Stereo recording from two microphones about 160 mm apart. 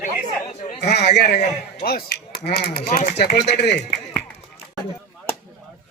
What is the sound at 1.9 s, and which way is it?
Speech, 75° left (ahead or behind).